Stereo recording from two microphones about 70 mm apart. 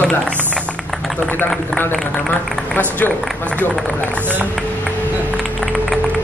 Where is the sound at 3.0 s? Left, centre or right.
Left.